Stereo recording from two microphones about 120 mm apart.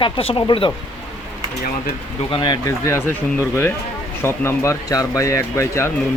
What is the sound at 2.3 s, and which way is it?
Speech, 40° left (ahead or behind).